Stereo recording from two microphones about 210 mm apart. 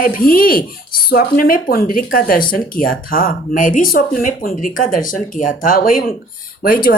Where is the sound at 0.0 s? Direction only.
45° left (ahead or behind).